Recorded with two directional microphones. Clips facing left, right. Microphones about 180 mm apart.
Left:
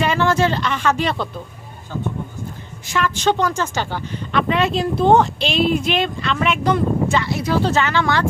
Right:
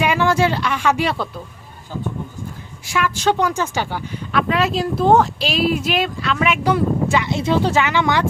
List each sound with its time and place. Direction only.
0.0 s speech: 10° right (ahead or behind)
2.8 s speech: 10° right (ahead or behind)
7.3 s speech: 25° right (ahead or behind)
7.6 s speech: 15° right (ahead or behind)